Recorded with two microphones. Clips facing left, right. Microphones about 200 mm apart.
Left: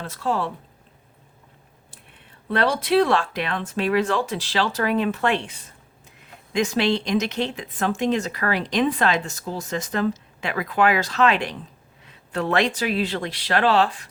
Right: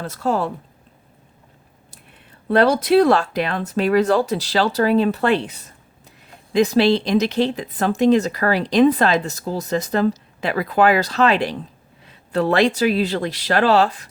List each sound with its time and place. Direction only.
0.0 s speech: 40° right (ahead or behind)
2.5 s speech: 40° right (ahead or behind)